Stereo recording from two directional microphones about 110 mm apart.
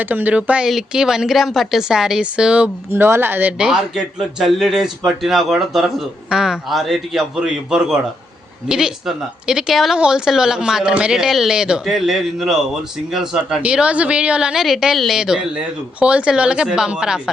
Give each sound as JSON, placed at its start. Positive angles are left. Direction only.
{"t": 0.0, "sound": "a man's voice", "side_deg": -15}
{"t": 2.9, "sound": "speech", "side_deg": -20}
{"t": 3.6, "sound": "a man's voice", "side_deg": -5}